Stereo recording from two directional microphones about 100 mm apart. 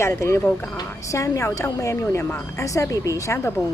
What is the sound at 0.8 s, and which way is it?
A woman's voice, 30° left (ahead or behind).